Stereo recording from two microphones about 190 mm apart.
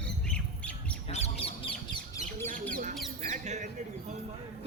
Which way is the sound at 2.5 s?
45° right (ahead or behind).